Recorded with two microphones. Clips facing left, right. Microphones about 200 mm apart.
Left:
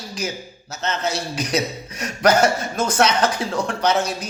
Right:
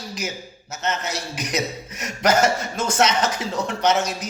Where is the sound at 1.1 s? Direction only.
35° left (ahead or behind).